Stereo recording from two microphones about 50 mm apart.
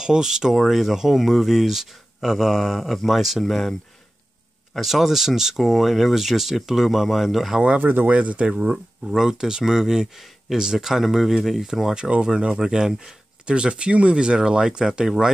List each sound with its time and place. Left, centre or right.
0.0 s speech: centre
4.7 s speech: centre
7.8 s speech: right
8.1 s speech: right; by 11.9 s centre
11.9 s speech: centre